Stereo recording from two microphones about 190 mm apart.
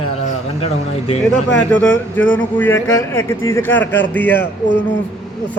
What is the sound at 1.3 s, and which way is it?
A man's voice, 10° left (ahead or behind).